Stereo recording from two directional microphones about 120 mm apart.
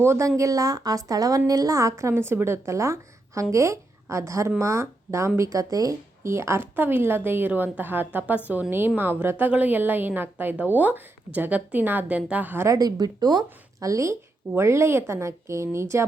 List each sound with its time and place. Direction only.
0.0 s a woman's voice: 25° right (ahead or behind)